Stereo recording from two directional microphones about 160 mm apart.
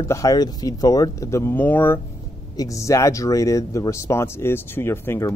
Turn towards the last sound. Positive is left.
turn(degrees=15)  # may be behind; listen again after turning